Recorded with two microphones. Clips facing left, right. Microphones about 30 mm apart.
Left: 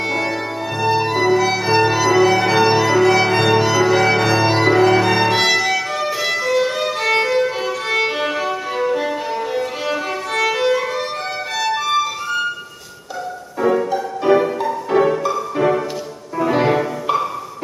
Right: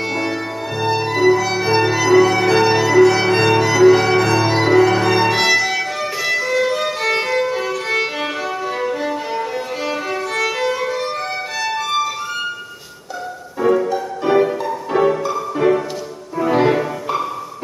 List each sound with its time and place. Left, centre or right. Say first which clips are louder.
0.1 s music: left 1 dB; centre
3.2 s violin: even; centre
4.8 s music: left 1 dB; centre
5.9 s violin: even; centre
9.3 s music: left 1 dB; centre
13.6 s music: right 1 dB; centre